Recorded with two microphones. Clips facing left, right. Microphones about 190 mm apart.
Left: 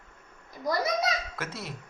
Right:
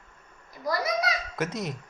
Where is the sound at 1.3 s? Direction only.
20° right (ahead or behind).